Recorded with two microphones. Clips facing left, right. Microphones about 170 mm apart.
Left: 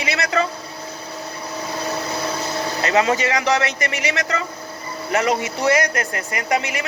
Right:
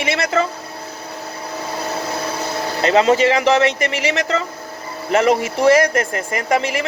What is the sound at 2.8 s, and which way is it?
Speech, 30° right (ahead or behind).